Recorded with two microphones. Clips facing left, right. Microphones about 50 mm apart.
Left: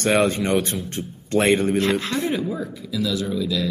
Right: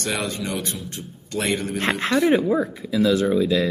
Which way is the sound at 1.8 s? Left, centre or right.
Right.